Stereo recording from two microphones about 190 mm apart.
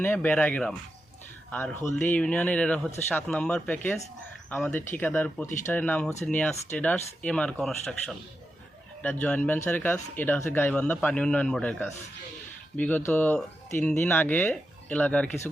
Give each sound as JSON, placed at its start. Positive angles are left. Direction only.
{"t": 0.0, "sound": "speech", "side_deg": 10}